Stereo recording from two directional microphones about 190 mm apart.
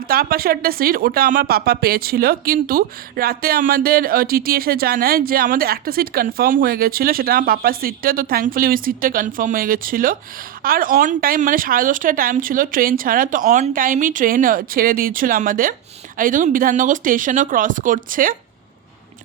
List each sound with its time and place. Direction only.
0.1 s speech: 50° right (ahead or behind)